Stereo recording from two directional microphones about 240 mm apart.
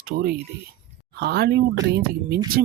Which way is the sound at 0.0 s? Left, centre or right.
Right.